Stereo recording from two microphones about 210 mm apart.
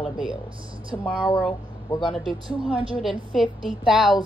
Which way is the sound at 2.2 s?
25° right (ahead or behind).